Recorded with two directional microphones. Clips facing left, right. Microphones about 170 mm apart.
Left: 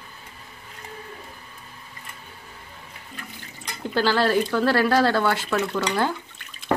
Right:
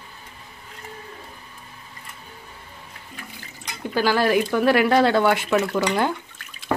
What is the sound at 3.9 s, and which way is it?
Speech, 10° right (ahead or behind).